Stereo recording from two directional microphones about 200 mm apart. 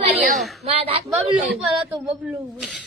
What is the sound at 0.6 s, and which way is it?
Speech, 30° right (ahead or behind).